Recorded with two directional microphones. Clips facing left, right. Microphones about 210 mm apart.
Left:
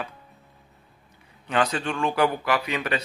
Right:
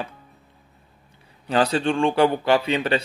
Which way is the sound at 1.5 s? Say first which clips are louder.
Right 5 dB; 30° right (ahead or behind).